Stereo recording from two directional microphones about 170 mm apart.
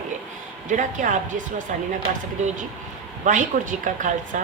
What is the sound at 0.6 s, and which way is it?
Speech, 50° right (ahead or behind).